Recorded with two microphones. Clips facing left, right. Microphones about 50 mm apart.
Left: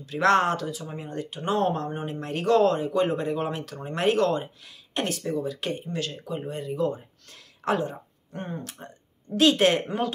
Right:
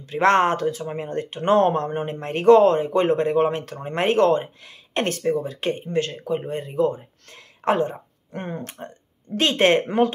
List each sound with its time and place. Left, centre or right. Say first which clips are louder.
0.0 s speech: right 3 dB; right
8.3 s speech: right 4 dB; right
9.4 s speech: right 2 dB; right